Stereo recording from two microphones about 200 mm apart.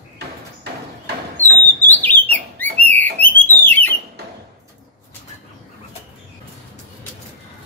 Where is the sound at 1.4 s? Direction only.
35° left (ahead or behind).